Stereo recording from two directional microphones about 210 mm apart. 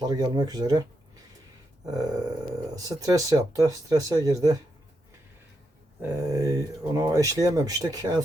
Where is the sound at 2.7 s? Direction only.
15° right (ahead or behind).